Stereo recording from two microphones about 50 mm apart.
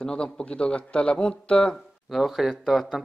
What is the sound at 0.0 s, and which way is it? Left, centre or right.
A man's voice, centre.